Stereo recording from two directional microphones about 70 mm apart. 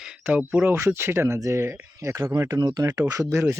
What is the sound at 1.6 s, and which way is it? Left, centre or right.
Speech, right.